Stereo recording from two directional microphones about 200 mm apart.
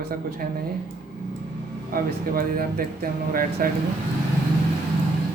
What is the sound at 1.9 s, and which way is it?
Speech, 45° right (ahead or behind).